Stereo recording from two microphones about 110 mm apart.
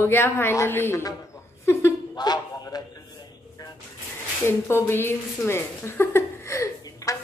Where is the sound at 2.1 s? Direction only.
40° left (ahead or behind).